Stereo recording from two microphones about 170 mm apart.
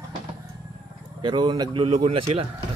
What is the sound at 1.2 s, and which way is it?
Chicken, 30° right (ahead or behind).